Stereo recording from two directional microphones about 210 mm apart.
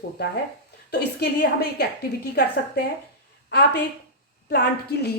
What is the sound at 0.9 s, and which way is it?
Speech, 50° left (ahead or behind).